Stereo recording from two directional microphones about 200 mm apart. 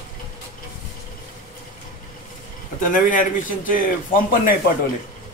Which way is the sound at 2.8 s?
40° left (ahead or behind).